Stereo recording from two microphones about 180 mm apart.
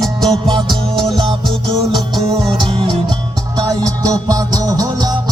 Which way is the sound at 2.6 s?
30° right (ahead or behind).